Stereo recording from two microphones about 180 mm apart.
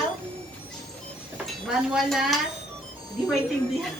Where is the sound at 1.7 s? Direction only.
Centre (ahead or behind).